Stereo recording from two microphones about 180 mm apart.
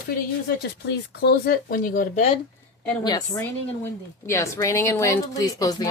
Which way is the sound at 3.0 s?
20° left (ahead or behind).